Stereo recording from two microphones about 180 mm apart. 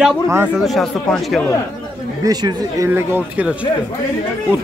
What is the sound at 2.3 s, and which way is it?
Speech, 20° right (ahead or behind).